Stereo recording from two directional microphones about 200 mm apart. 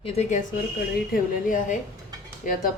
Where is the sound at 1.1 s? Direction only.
40° left (ahead or behind).